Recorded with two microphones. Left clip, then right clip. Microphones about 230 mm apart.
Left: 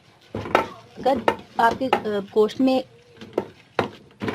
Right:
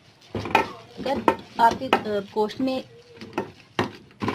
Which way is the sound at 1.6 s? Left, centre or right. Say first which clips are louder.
Even; left.